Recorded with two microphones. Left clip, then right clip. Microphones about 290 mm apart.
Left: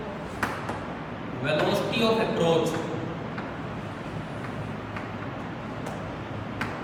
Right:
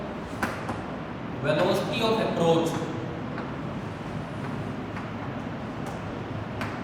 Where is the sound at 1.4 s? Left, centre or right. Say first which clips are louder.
Right 1 dB; centre.